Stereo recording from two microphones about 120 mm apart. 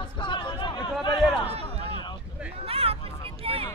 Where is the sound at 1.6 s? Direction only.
40° left (ahead or behind).